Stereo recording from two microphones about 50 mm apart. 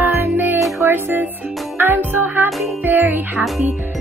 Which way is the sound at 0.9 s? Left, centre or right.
Right.